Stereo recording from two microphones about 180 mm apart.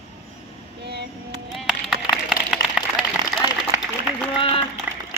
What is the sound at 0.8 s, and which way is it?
Child singing, 65° right (ahead or behind).